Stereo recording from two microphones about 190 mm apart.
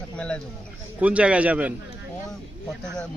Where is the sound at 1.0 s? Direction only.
5° right (ahead or behind).